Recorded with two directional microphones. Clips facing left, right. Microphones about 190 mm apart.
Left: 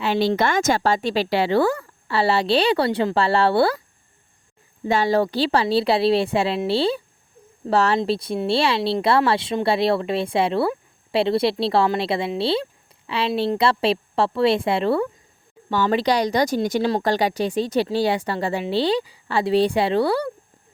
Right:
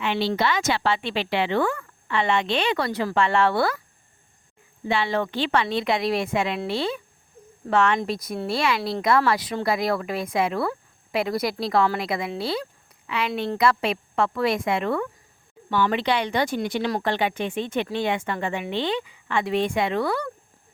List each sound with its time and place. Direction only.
0.0 s a woman's voice: 40° left (ahead or behind)
4.9 s a woman's voice: 40° left (ahead or behind)